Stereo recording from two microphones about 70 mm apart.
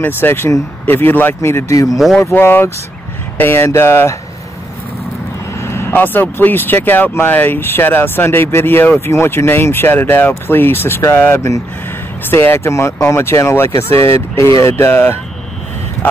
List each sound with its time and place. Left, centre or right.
0.0 s speech: left
5.6 s speech: left